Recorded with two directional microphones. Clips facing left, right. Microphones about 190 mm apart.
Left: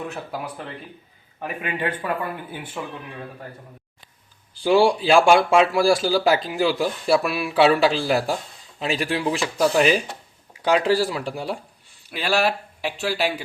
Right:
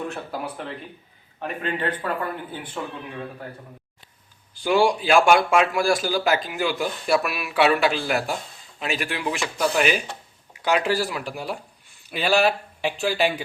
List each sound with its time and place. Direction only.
1.4 s a man's voice: 10° left (ahead or behind)
4.6 s speech: 30° left (ahead or behind)
12.1 s speech: centre (ahead or behind)